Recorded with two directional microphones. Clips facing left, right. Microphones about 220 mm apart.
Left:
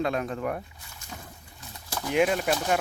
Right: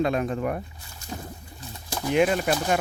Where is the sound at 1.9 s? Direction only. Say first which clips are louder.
Right 4 dB; 15° right (ahead or behind).